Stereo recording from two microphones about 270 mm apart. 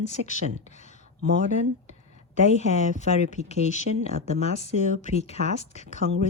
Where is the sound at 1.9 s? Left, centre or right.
Left.